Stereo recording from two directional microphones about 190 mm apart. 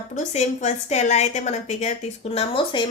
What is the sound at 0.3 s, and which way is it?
A woman's voice, 35° left (ahead or behind).